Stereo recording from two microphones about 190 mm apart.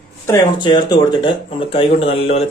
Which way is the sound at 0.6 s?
25° left (ahead or behind).